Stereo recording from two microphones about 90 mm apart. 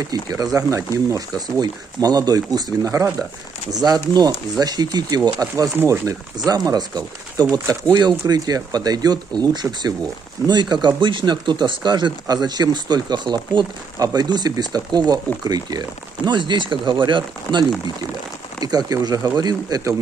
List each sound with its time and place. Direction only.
0.0 s speech: 45° right (ahead or behind)
3.7 s speech: 45° right (ahead or behind)
13.9 s speech: 45° right (ahead or behind)
16.3 s speech: 55° right (ahead or behind)
18.6 s speech: 45° right (ahead or behind)